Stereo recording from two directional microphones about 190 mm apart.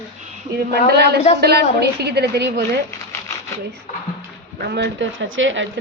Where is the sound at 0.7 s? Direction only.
55° right (ahead or behind).